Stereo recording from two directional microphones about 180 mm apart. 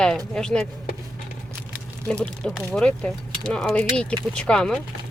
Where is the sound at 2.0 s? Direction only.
5° left (ahead or behind).